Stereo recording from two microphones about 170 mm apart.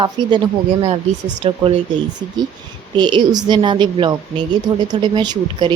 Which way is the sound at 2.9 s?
25° right (ahead or behind).